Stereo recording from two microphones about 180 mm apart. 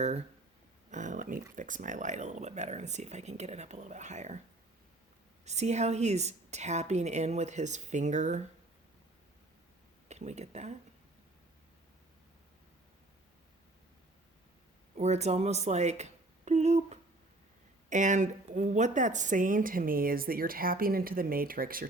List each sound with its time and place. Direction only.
0.9 s speech: 45° right (ahead or behind)
5.5 s speech: 40° right (ahead or behind)
10.1 s speech: 40° right (ahead or behind)
14.9 s a woman's voice: 40° right (ahead or behind)